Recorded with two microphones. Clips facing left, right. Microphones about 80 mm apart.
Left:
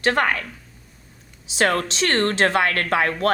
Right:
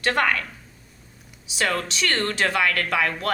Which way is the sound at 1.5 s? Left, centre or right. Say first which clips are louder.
Left 5 dB; left.